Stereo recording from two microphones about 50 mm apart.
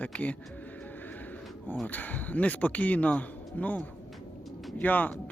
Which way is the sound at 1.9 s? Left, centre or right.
Left.